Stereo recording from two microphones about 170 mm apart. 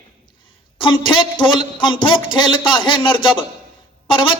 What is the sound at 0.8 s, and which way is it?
A man's voice, 30° left (ahead or behind).